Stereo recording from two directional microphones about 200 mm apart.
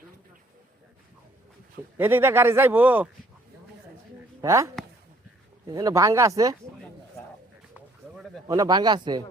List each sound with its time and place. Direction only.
2.0 s speech: 10° right (ahead or behind)
4.4 s speech: 15° right (ahead or behind)
7.7 s a sound: 5° right (ahead or behind)
8.4 s speech: 20° right (ahead or behind)